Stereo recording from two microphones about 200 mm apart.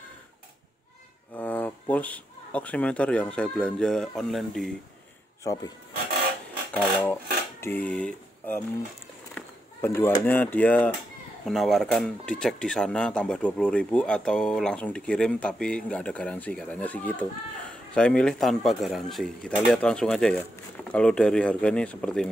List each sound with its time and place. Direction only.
1.3 s speech: 10° left (ahead or behind)
5.4 s speech: 15° left (ahead or behind)
6.7 s a sound: 5° left (ahead or behind)
7.6 s speech: 10° left (ahead or behind)